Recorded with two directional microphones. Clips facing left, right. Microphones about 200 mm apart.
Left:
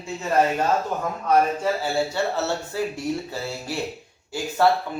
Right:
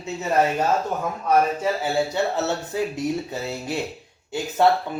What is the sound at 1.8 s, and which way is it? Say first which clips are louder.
Speech: right 1 dB; 20° right (ahead or behind).